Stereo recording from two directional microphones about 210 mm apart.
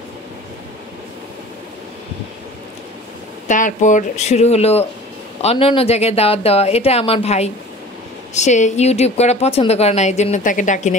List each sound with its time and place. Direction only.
3.4 s a woman's voice: 35° left (ahead or behind)